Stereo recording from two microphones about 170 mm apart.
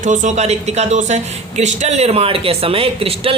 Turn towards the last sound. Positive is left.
turn(degrees=-35)  # may be behind; listen again after turning